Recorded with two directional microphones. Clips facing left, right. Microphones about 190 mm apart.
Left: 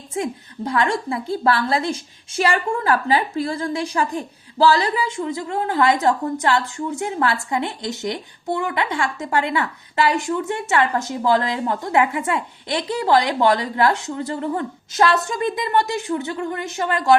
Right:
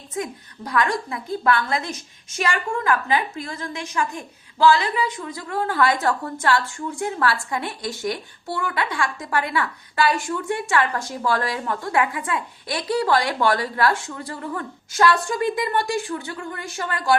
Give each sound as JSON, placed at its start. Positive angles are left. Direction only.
{"t": 0.1, "sound": "a woman's voice", "side_deg": 25}